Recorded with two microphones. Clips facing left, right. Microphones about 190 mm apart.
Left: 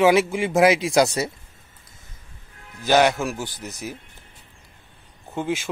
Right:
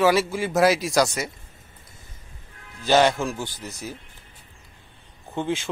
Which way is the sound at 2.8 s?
10° left (ahead or behind).